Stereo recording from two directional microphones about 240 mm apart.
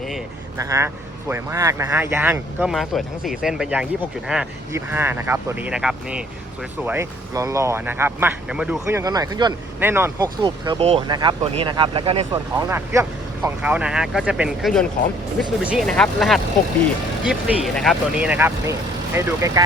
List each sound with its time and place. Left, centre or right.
0.6 s speech: centre
10.4 s speech: right
12.6 s speech: centre